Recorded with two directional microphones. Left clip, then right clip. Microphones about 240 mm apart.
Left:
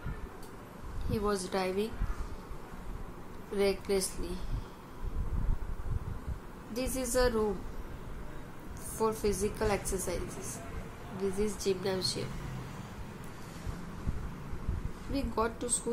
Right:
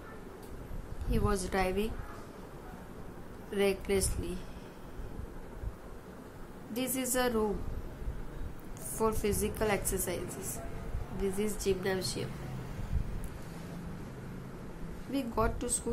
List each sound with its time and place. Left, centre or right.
1.1 s speech: centre
3.5 s speech: centre
6.7 s speech: centre
8.9 s speech: centre
15.1 s speech: centre